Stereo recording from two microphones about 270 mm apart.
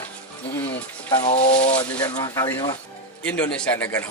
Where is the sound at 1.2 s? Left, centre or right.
Left.